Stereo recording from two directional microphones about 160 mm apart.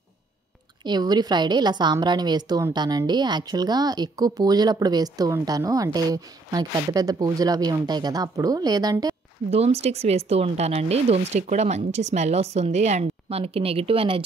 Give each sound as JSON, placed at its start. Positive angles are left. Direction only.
{"t": 0.8, "sound": "a woman's voice", "side_deg": -25}
{"t": 9.5, "sound": "speech", "side_deg": -40}